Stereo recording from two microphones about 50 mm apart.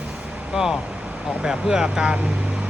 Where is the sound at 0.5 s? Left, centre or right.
Centre.